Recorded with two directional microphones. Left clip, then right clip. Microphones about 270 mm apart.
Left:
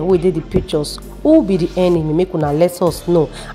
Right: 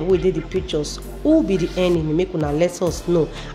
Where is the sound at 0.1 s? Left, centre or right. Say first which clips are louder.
Left 3 dB; left.